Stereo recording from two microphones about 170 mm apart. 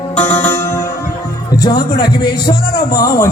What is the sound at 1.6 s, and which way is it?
A man's voice, 25° left (ahead or behind).